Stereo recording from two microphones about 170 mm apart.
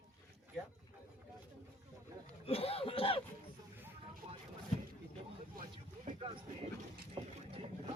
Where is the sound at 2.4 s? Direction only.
35° left (ahead or behind).